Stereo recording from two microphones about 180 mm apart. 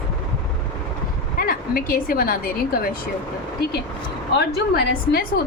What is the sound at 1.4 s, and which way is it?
A woman's voice, 55° left (ahead or behind).